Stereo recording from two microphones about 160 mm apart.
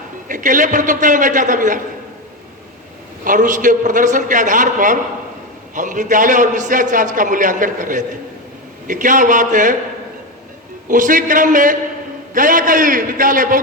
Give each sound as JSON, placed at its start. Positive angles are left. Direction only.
{"t": 0.3, "sound": "a man's voice", "side_deg": -55}
{"t": 3.2, "sound": "a man's voice", "side_deg": -55}
{"t": 10.8, "sound": "a man's voice", "side_deg": -55}